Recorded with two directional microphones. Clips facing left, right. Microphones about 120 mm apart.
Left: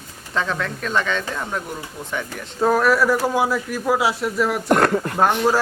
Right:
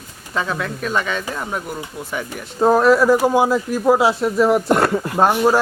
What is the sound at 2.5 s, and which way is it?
Speech, 25° right (ahead or behind).